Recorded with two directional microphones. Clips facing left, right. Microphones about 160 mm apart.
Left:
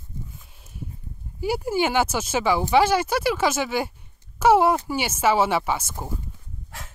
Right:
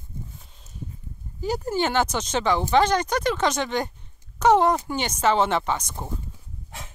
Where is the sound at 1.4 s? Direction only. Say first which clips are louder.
Left 2 dB; 10° left (ahead or behind).